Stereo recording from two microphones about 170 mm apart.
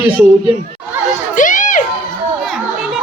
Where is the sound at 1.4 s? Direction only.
50° left (ahead or behind).